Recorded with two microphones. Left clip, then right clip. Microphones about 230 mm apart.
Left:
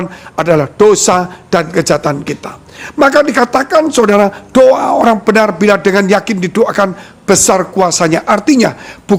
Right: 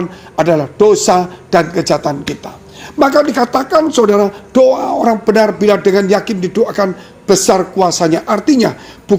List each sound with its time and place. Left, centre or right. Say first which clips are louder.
0.0 s a man's voice: right 1 dB; left